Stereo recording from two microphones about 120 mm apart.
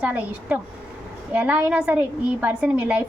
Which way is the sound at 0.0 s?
10° right (ahead or behind).